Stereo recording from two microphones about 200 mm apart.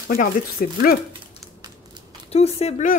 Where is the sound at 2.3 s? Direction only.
30° left (ahead or behind).